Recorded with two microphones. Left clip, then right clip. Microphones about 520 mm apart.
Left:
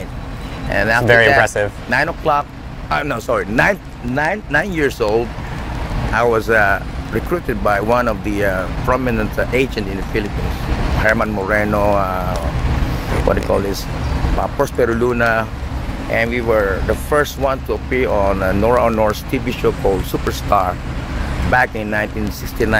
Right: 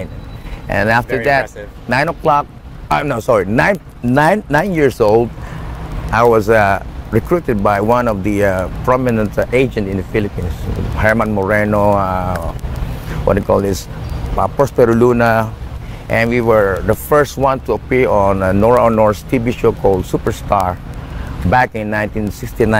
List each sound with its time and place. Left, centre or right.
0.7 s speech: right
1.4 s speech: left
1.9 s speech: right
4.1 s speech: right